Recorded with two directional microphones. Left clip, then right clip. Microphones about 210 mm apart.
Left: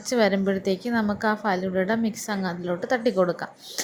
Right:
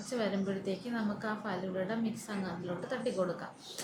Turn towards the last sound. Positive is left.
turn(degrees=40)  # may be behind; listen again after turning